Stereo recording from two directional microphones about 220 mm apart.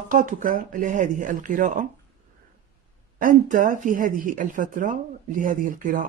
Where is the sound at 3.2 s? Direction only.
35° right (ahead or behind).